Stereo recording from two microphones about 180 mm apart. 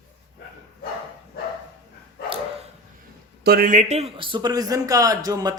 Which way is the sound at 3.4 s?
55° right (ahead or behind).